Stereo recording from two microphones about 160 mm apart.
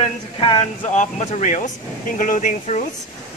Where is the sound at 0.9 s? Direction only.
50° left (ahead or behind).